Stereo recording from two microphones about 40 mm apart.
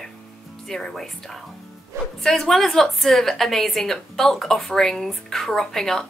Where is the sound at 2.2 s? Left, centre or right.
Centre.